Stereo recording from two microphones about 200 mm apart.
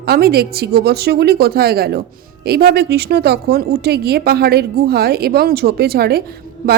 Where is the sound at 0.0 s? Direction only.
50° right (ahead or behind).